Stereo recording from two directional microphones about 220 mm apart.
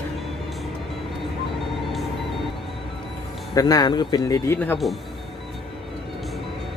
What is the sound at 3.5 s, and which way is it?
Speech, 15° left (ahead or behind).